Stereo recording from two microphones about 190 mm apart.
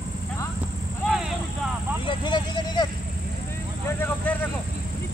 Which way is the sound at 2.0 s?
25° left (ahead or behind).